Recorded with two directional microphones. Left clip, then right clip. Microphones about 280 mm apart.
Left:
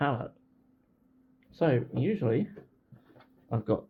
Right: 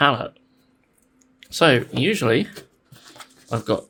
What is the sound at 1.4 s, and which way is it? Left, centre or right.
Speech, right.